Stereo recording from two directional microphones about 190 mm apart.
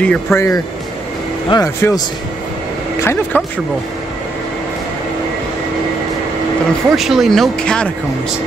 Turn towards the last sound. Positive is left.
turn(degrees=5)  # may be behind; listen again after turning